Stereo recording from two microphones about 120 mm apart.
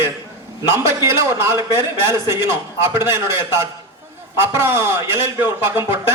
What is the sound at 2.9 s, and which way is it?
Speech, 20° right (ahead or behind).